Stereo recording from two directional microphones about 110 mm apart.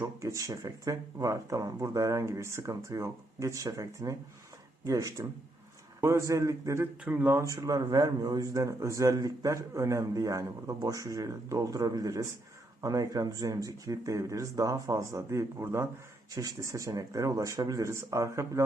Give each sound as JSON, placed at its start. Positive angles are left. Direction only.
{"t": 0.0, "sound": "a man's voice", "side_deg": -30}
{"t": 7.0, "sound": "a man's voice", "side_deg": -15}